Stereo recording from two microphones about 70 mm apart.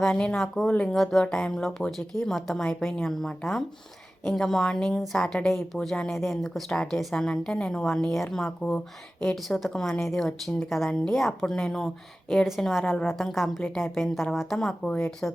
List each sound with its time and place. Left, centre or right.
0.1 s a woman's voice: centre
0.9 s a woman's voice: centre
1.2 s a woman's voice: centre
9.2 s a woman's voice: centre
12.8 s a woman's voice: centre
13.1 s a woman's voice: centre
15.2 s speech: left